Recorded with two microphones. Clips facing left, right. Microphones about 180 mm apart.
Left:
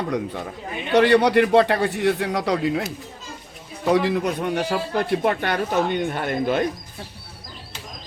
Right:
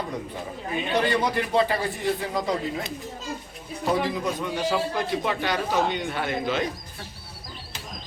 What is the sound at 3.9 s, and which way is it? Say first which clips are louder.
Speech: left 5 dB; 70° left (ahead or behind).